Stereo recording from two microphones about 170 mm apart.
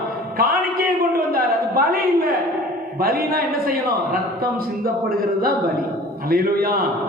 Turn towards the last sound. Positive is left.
turn(degrees=-60)  # may be behind; listen again after turning